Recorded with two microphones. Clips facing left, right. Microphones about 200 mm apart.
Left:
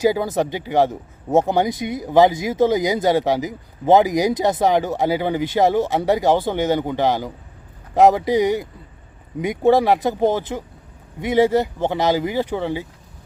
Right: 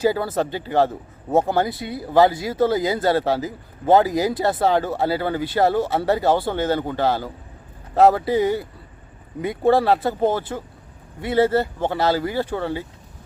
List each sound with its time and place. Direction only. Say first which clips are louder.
0.0 s speech: left 2 dB; 15° left (ahead or behind)